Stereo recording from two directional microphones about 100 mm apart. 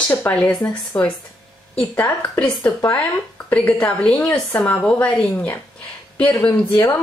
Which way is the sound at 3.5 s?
15° left (ahead or behind).